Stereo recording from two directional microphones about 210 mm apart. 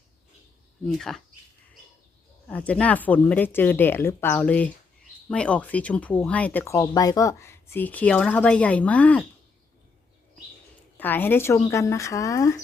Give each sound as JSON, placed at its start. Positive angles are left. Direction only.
{"t": 0.9, "sound": "speech", "side_deg": 0}
{"t": 2.5, "sound": "speech", "side_deg": 5}
{"t": 10.9, "sound": "speech", "side_deg": 10}